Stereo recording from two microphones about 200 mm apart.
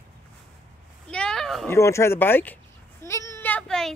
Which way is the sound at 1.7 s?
15° left (ahead or behind).